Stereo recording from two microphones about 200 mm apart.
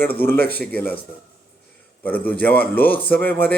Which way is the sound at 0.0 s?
10° left (ahead or behind).